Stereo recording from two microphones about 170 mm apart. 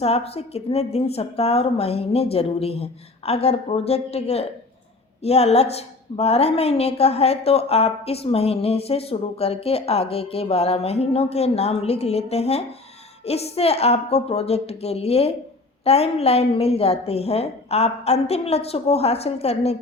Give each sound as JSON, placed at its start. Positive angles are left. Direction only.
{"t": 0.0, "sound": "a woman's voice", "side_deg": 35}